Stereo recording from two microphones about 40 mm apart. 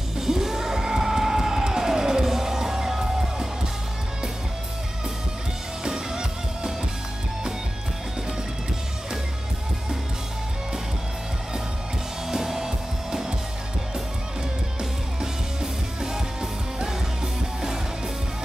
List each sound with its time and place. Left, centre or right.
0.2 s music: centre
5.9 s music: centre
12.3 s music: centre
14.8 s music: centre